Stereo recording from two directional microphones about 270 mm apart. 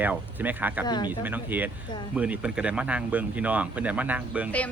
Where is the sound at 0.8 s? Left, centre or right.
Centre.